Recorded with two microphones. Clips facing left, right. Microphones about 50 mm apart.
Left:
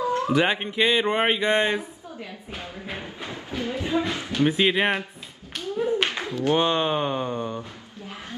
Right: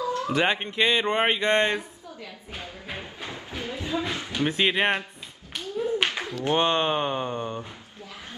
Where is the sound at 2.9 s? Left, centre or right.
Centre.